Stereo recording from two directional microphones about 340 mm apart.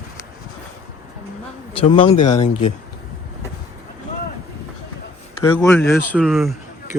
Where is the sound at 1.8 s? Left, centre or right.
Centre.